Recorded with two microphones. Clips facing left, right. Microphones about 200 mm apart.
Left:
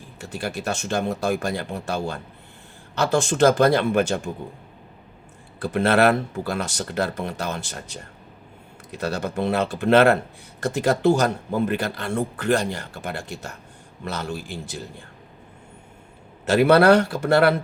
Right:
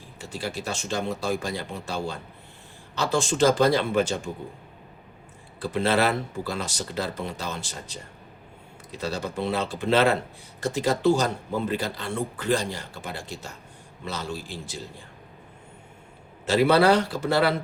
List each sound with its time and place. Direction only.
0.2 s speech: 60° left (ahead or behind)
5.5 s speech: 60° left (ahead or behind)
16.5 s speech: 60° left (ahead or behind)